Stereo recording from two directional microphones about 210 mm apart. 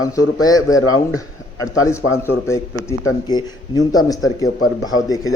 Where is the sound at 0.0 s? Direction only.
15° left (ahead or behind).